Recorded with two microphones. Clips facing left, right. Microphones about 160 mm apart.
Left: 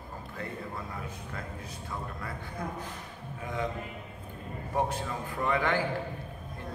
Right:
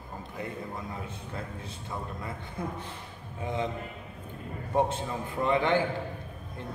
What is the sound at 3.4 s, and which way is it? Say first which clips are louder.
Speech: right 3 dB; 25° right (ahead or behind).